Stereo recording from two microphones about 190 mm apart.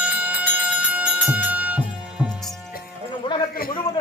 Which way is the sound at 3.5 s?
50° left (ahead or behind).